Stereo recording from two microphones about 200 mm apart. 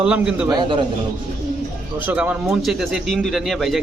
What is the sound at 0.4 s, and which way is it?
Speech, 20° right (ahead or behind).